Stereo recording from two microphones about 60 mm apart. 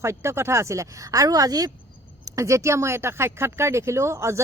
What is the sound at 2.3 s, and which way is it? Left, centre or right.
Speech, right.